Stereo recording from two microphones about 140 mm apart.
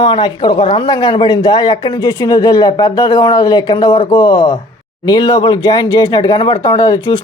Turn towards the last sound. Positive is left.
turn(degrees=35)  # may be behind; listen again after turning